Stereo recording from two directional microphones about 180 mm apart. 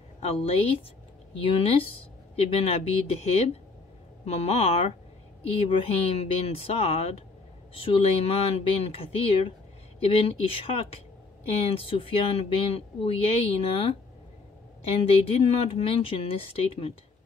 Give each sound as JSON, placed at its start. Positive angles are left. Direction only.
{"t": 0.2, "sound": "speech", "side_deg": 35}
{"t": 15.0, "sound": "speech", "side_deg": 35}